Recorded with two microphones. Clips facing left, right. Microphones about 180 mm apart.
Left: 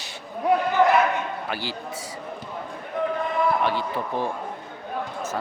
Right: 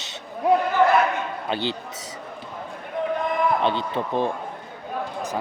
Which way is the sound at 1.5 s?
20° right (ahead or behind).